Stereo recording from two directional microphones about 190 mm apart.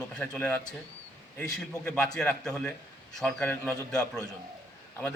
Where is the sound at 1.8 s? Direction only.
5° left (ahead or behind).